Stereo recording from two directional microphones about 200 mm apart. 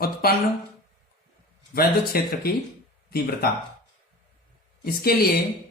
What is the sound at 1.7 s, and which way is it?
Speech, 50° left (ahead or behind).